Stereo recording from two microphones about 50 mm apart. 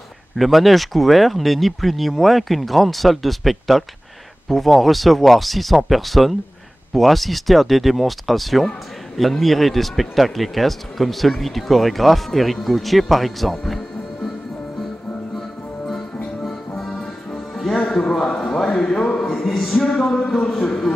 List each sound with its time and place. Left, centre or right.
0.4 s speech: centre
16.4 s music: centre